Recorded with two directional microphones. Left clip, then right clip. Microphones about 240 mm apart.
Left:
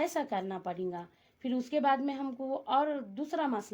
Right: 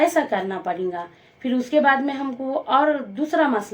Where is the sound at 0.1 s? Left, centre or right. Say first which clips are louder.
Right 12 dB; left.